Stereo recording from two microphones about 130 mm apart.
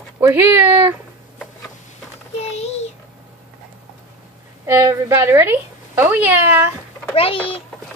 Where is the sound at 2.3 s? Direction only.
55° left (ahead or behind).